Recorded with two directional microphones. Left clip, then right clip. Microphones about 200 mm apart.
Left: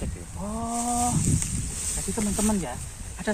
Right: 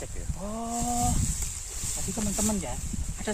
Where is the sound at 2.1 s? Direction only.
25° right (ahead or behind).